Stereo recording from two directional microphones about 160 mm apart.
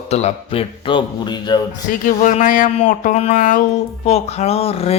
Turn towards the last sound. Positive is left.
turn(degrees=40)  # may be behind; listen again after turning